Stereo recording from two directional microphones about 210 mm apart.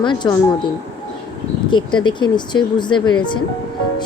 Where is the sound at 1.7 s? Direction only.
20° left (ahead or behind).